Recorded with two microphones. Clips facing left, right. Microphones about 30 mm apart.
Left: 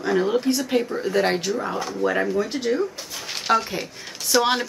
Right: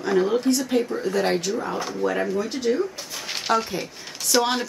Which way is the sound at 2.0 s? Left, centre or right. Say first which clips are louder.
Left 2 dB; centre.